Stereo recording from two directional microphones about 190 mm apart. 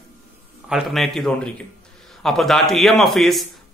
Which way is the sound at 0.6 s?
Centre (ahead or behind).